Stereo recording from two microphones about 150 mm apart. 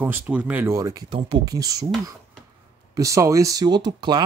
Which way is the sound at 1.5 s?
25° right (ahead or behind).